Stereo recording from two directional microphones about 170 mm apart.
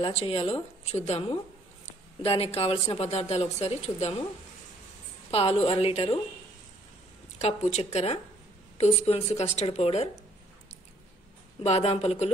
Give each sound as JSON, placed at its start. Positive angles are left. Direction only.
{"t": 0.0, "sound": "speech", "side_deg": 35}
{"t": 5.3, "sound": "speech", "side_deg": 35}
{"t": 7.4, "sound": "speech", "side_deg": 40}
{"t": 11.6, "sound": "speech", "side_deg": 40}